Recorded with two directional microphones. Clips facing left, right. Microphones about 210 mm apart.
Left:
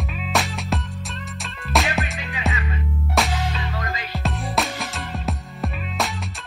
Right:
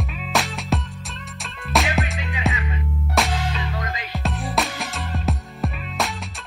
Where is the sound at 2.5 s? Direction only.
15° right (ahead or behind).